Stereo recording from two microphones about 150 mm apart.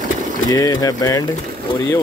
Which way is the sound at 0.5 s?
25° left (ahead or behind).